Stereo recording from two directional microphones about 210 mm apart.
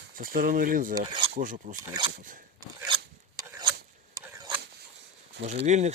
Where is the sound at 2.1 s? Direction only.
40° right (ahead or behind).